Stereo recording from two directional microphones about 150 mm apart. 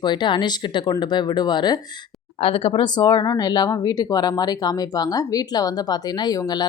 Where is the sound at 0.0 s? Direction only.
30° left (ahead or behind).